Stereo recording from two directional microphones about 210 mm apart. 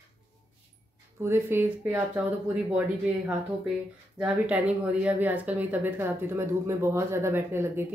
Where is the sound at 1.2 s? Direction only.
10° right (ahead or behind).